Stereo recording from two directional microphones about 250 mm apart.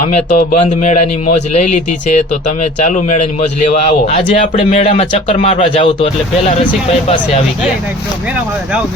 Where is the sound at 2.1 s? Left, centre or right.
Left.